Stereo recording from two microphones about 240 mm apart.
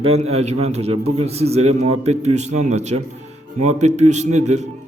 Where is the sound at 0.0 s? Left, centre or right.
Right.